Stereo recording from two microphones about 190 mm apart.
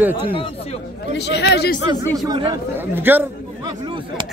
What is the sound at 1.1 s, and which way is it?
Speech, 65° left (ahead or behind).